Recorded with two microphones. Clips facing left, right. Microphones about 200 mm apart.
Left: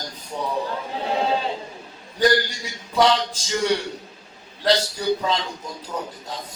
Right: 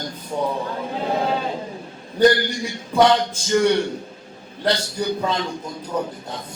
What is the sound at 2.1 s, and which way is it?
A man's voice, 55° right (ahead or behind).